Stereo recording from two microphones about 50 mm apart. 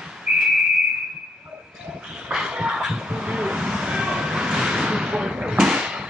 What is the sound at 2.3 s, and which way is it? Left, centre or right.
Music, centre.